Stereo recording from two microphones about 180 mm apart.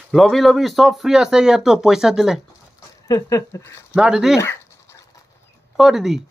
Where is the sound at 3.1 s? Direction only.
20° left (ahead or behind).